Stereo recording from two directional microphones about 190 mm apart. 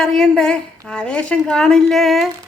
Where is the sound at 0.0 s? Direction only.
Centre (ahead or behind).